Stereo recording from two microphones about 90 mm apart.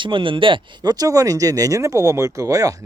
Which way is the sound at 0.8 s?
45° right (ahead or behind).